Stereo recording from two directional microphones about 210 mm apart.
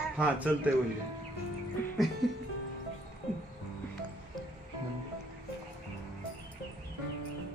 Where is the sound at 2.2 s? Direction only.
Centre (ahead or behind).